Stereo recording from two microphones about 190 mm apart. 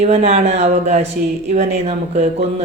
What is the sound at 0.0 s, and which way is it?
Speech, 35° right (ahead or behind).